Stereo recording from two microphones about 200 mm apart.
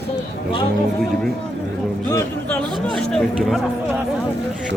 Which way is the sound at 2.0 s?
15° left (ahead or behind).